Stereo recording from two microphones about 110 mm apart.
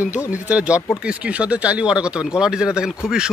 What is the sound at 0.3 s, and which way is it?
Speech, 15° right (ahead or behind).